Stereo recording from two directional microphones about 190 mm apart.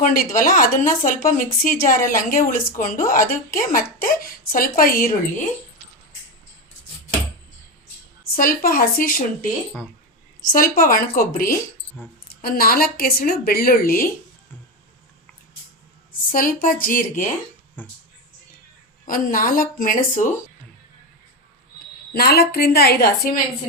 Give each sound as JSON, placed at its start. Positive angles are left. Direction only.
{"t": 0.0, "sound": "speech", "side_deg": 45}
{"t": 8.2, "sound": "speech", "side_deg": 50}
{"t": 10.5, "sound": "speech", "side_deg": 45}
{"t": 16.3, "sound": "speech", "side_deg": 45}
{"t": 17.8, "sound": "speech", "side_deg": 10}
{"t": 19.0, "sound": "speech", "side_deg": 45}
{"t": 22.1, "sound": "a woman's voice", "side_deg": 55}